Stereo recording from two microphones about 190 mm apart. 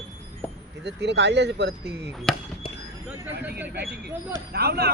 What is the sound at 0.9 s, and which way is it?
Speech, 65° right (ahead or behind).